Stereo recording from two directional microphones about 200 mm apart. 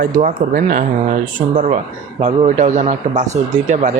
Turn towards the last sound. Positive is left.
turn(degrees=-35)  # may be behind; listen again after turning